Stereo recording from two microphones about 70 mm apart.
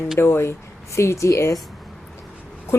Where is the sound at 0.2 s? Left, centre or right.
Left.